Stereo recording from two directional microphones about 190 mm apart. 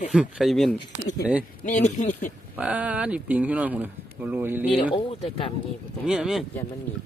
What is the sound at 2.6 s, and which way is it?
Speech, 5° right (ahead or behind).